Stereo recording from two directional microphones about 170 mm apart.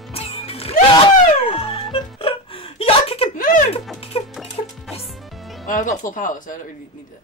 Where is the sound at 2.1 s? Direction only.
30° left (ahead or behind).